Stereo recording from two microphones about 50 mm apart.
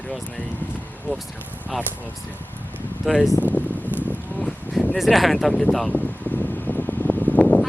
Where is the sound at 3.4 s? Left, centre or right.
Left.